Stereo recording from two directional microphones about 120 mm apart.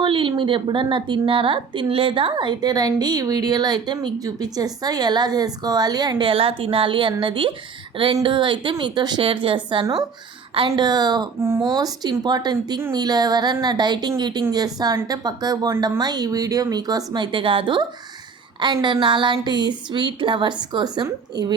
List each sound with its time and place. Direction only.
0.0 s a woman's voice: 45° right (ahead or behind)
10.8 s a woman's voice: 35° right (ahead or behind)
11.3 s speech: 20° right (ahead or behind)
11.6 s a woman's voice: 35° right (ahead or behind)